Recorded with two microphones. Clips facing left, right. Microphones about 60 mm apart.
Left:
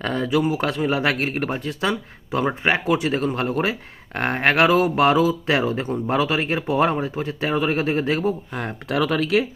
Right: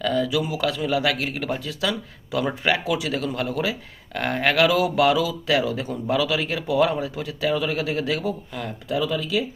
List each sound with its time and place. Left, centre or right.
0.0 s speech: left
8.9 s speech: left